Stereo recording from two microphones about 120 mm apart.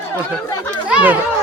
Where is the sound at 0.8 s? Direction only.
10° right (ahead or behind).